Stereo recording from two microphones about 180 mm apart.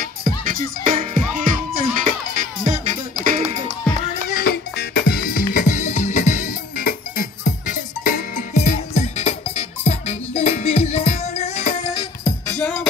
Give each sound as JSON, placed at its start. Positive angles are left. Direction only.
{"t": 0.4, "sound": "music", "side_deg": -50}
{"t": 4.3, "sound": "music", "side_deg": 55}
{"t": 12.0, "sound": "music", "side_deg": 15}